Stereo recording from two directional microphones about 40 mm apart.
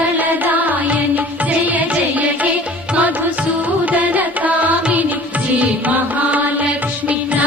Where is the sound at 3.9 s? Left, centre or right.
Right.